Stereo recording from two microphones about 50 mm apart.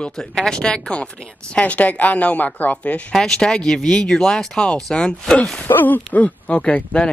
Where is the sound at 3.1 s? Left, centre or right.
Centre.